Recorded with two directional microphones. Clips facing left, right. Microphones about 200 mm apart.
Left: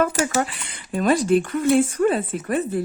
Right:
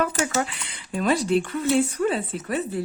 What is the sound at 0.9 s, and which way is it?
Speech, 45° left (ahead or behind).